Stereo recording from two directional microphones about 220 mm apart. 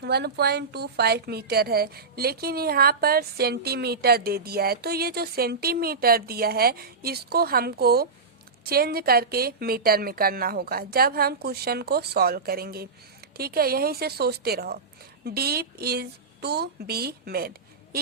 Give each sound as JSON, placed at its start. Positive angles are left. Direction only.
{"t": 0.0, "sound": "a woman's voice", "side_deg": -50}